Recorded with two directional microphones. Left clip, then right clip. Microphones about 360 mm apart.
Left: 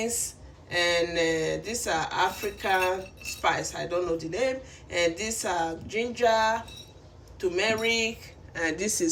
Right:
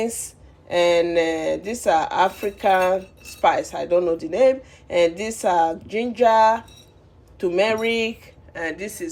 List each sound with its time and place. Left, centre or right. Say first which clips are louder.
0.0 s speech: right 5 dB; centre